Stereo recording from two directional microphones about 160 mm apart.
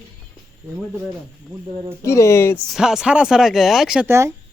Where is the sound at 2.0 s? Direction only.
20° left (ahead or behind).